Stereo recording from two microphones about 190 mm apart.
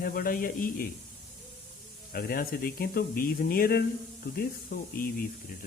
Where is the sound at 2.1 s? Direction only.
50° left (ahead or behind).